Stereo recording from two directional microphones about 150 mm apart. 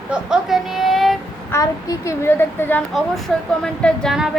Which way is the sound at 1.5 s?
20° left (ahead or behind).